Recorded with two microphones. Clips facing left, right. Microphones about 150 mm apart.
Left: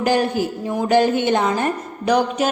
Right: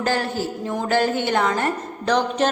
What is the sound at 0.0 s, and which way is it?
A woman's voice, 15° left (ahead or behind).